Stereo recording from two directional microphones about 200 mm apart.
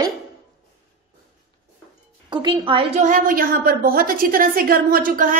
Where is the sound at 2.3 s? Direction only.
25° right (ahead or behind).